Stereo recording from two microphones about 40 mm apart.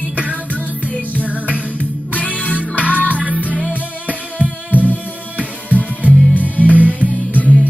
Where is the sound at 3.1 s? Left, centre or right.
Right.